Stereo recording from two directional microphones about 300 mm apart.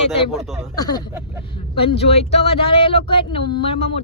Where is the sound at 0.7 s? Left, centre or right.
Centre.